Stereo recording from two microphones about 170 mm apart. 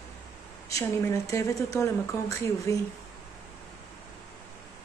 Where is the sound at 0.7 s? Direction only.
20° left (ahead or behind).